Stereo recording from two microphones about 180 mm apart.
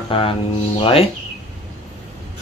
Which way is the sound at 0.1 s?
30° left (ahead or behind).